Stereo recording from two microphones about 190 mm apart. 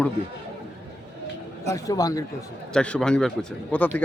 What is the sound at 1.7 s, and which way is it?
Speech, 20° left (ahead or behind).